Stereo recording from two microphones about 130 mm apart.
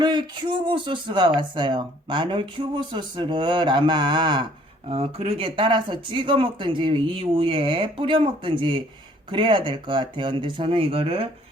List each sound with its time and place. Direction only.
0.0 s speech: 35° right (ahead or behind)